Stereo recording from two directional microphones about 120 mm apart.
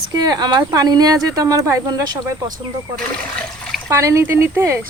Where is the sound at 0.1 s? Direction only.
35° right (ahead or behind).